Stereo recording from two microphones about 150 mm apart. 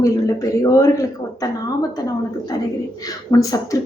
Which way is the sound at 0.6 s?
25° left (ahead or behind).